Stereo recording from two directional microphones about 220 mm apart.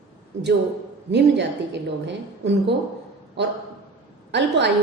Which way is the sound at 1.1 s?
50° right (ahead or behind).